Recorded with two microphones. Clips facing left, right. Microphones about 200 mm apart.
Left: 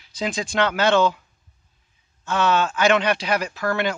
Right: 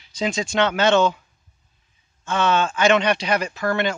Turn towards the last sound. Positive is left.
turn(degrees=5)  # may be behind; listen again after turning